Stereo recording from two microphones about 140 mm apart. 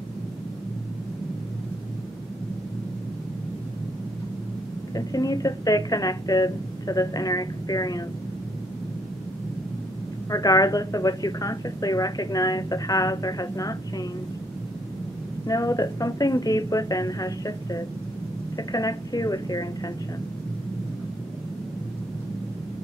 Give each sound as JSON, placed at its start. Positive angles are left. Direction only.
{"t": 4.9, "sound": "speech", "side_deg": 25}
{"t": 10.3, "sound": "speech", "side_deg": 25}
{"t": 15.4, "sound": "speech", "side_deg": 25}